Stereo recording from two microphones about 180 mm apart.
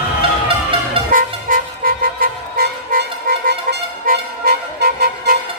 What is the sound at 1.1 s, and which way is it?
Vehicle, 50° right (ahead or behind).